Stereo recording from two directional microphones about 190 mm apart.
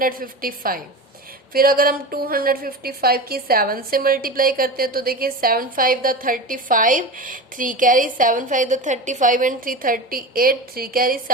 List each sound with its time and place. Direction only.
0.0 s a woman's voice: 50° right (ahead or behind)